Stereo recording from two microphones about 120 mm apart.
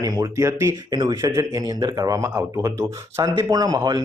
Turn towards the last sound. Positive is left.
turn(degrees=-30)  # may be behind; listen again after turning